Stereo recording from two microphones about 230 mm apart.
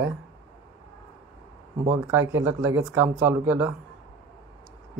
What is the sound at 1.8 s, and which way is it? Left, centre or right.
Speech, centre.